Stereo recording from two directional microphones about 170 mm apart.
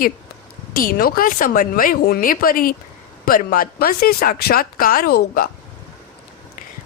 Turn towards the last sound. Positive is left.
turn(degrees=60)  # may be behind; listen again after turning